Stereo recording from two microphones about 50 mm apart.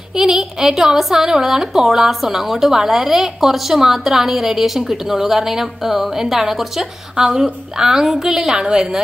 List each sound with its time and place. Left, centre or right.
0.2 s a woman's voice: centre